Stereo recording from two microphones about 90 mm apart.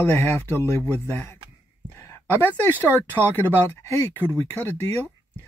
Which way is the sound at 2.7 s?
20° right (ahead or behind).